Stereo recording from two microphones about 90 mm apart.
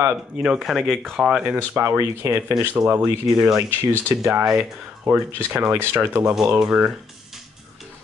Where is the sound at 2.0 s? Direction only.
35° right (ahead or behind).